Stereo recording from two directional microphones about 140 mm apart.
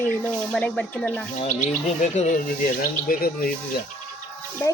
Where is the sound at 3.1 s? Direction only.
90° left.